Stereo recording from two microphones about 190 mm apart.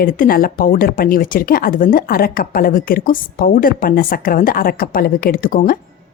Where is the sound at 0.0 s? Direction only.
50° left (ahead or behind).